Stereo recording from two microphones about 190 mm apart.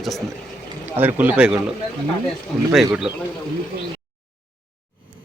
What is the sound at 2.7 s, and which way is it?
Speech, 5° right (ahead or behind).